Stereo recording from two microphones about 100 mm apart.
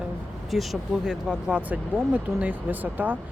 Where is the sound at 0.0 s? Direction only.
Centre (ahead or behind); by 3.2 s 15° right (ahead or behind).